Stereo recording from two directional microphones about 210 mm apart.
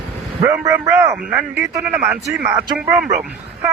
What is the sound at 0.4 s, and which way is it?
A man's voice, 15° right (ahead or behind).